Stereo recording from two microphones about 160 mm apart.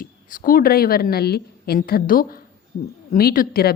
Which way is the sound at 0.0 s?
60° left (ahead or behind).